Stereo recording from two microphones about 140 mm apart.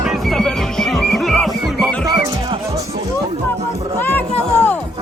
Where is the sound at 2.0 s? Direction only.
30° right (ahead or behind).